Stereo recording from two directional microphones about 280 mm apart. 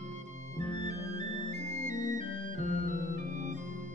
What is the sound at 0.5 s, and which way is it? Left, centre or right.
Music, right.